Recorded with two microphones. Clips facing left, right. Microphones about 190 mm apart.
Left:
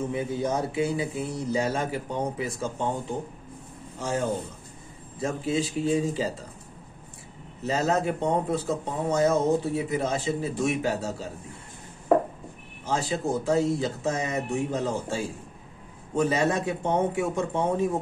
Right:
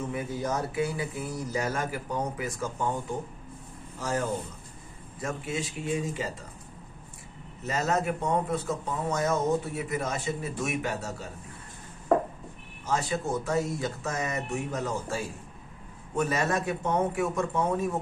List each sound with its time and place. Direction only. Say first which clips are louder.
0.1 s speech: left 4 dB; 25° left (ahead or behind)
7.6 s speech: left 3 dB; 30° left (ahead or behind)
12.8 s speech: left 2 dB; 30° left (ahead or behind)